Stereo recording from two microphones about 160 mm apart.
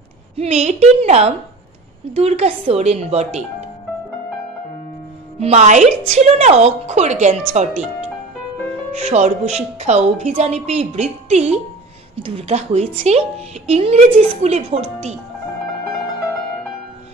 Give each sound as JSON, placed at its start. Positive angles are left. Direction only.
{"t": 0.4, "sound": "a woman's voice", "side_deg": -45}
{"t": 5.4, "sound": "a woman's voice", "side_deg": -45}
{"t": 8.9, "sound": "a woman's voice", "side_deg": -45}